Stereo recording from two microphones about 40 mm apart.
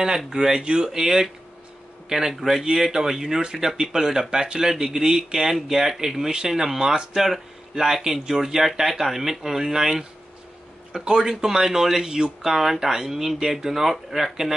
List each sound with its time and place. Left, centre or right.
0.3 s speech: centre
11.1 s speech: centre